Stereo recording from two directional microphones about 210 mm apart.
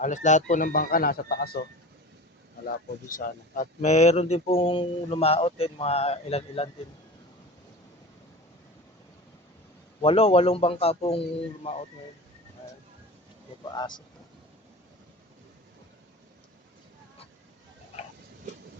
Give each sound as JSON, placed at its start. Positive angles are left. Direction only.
{"t": 0.0, "sound": "speech", "side_deg": 35}
{"t": 2.6, "sound": "speech", "side_deg": 40}
{"t": 10.0, "sound": "speech", "side_deg": 25}
{"t": 13.7, "sound": "speech", "side_deg": 20}